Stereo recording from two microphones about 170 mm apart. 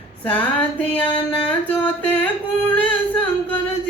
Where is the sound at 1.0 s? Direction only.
30° left (ahead or behind).